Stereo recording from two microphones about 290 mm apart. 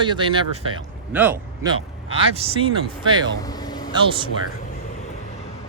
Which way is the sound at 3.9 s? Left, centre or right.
Centre.